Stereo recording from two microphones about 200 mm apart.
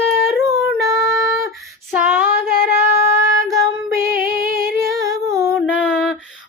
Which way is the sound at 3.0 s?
15° right (ahead or behind).